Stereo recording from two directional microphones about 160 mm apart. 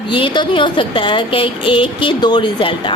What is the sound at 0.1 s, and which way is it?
A woman's voice, 30° left (ahead or behind).